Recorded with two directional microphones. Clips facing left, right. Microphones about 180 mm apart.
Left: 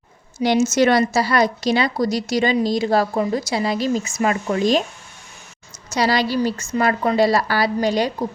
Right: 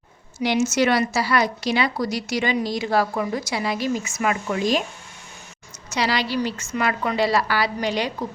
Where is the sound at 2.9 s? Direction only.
35° left (ahead or behind).